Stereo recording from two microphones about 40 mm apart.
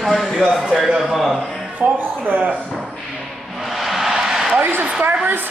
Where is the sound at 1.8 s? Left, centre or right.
Right.